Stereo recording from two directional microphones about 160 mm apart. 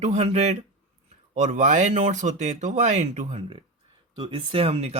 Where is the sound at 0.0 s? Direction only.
45° right (ahead or behind).